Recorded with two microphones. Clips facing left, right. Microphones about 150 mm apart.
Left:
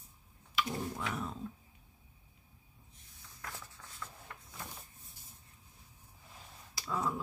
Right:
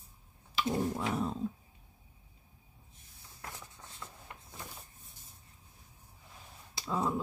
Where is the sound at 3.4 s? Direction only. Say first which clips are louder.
Right 1 dB; 20° right (ahead or behind).